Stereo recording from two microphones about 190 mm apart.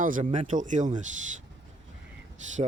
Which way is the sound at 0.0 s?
45° right (ahead or behind).